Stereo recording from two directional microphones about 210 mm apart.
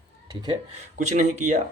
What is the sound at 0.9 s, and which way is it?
Speech, 35° right (ahead or behind).